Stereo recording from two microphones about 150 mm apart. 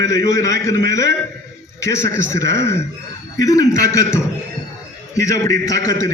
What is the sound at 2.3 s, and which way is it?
A man's voice, 20° left (ahead or behind).